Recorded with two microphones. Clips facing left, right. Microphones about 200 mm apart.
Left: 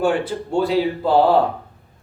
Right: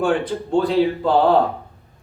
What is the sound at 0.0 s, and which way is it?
A man's voice, 5° left (ahead or behind).